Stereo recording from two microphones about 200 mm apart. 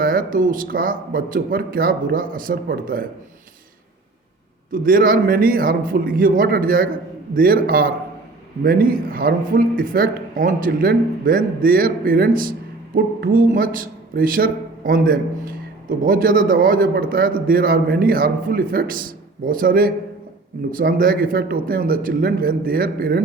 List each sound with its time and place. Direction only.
0.0 s a man's voice: 45° right (ahead or behind)
4.7 s a man's voice: 45° right (ahead or behind)